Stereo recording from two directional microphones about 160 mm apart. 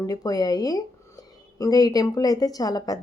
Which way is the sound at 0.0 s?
25° left (ahead or behind).